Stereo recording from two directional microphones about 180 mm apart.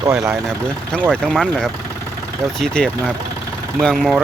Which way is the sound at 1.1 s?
5° left (ahead or behind).